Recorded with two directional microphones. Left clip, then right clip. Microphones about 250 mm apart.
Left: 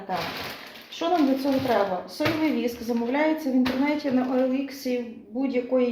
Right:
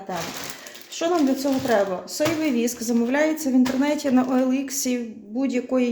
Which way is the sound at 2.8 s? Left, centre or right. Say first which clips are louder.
Right 2 dB; right.